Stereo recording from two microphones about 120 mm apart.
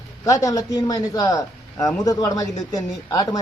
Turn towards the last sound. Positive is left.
turn(degrees=30)  # may be behind; listen again after turning